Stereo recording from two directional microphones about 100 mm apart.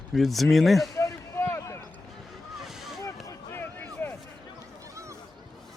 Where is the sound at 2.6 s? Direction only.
Centre (ahead or behind).